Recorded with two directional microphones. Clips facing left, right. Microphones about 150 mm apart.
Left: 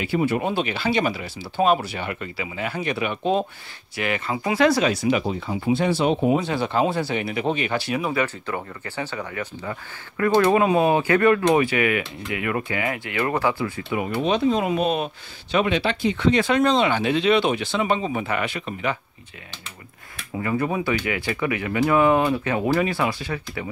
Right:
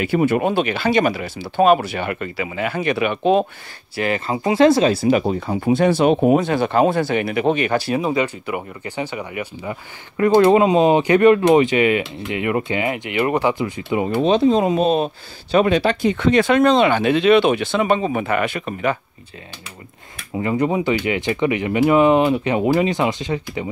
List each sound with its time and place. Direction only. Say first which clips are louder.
0.0 s speech: right 5 dB; 50° right (ahead or behind); by 3.4 s 70° right (ahead or behind)
3.9 s speech: right 4 dB; 35° right (ahead or behind); by 7.7 s 60° right (ahead or behind)
7.7 s speech: right 5 dB; 40° right (ahead or behind)
8.0 s speech: right 4 dB; 20° right (ahead or behind)
15.5 s speech: right 6 dB; 45° right (ahead or behind)
20.3 s speech: right 5 dB; 20° right (ahead or behind)